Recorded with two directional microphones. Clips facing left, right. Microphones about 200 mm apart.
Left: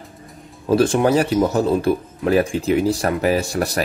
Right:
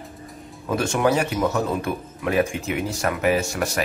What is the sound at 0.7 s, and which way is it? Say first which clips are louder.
Speech: left 5 dB; 35° left (ahead or behind).